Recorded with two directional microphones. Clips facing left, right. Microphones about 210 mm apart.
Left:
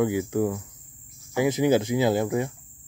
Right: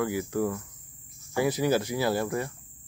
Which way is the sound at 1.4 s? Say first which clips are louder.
Left 4 dB; 20° left (ahead or behind).